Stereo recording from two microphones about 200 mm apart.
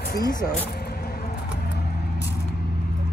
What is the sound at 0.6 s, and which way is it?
Vehicle, 50° left (ahead or behind).